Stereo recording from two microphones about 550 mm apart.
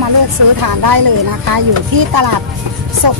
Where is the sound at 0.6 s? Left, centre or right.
Right.